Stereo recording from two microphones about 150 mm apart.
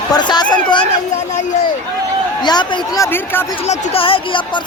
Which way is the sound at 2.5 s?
30° left (ahead or behind).